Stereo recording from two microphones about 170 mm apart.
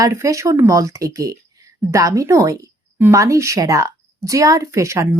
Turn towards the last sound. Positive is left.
turn(degrees=-15)  # may be behind; listen again after turning